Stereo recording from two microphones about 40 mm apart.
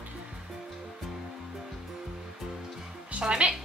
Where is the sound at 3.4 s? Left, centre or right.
Right.